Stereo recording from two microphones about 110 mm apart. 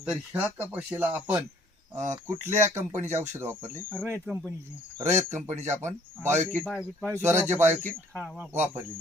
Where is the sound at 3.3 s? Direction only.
20° right (ahead or behind).